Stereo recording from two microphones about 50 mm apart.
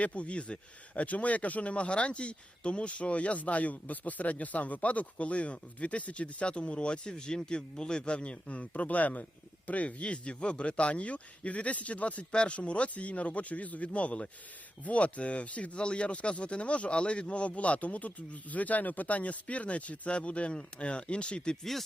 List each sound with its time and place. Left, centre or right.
0.0 s speech: left